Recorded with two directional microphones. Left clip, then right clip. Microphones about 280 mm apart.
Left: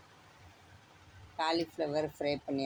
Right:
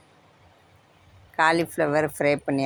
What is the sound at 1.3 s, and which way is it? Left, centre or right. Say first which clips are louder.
Speech: right 12 dB; right.